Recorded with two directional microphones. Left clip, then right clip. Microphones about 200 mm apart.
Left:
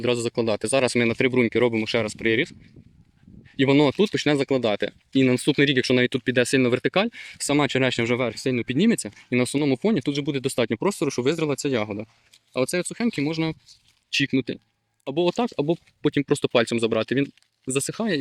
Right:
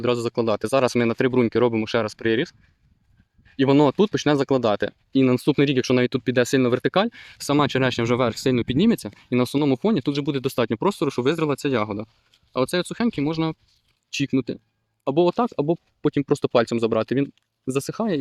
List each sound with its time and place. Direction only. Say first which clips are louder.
0.0 s speech: right 1 dB; 5° right (ahead or behind)
3.6 s speech: right 1 dB; 5° right (ahead or behind)